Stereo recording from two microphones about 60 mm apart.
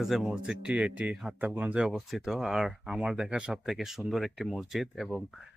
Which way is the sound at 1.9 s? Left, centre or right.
Centre.